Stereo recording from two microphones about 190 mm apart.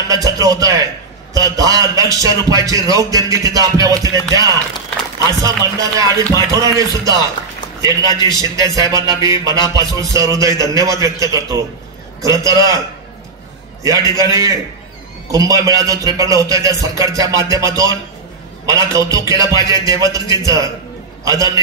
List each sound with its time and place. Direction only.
0.1 s music: 20° right (ahead or behind)
13.8 s music: 15° right (ahead or behind)
21.2 s a man's voice: 15° right (ahead or behind)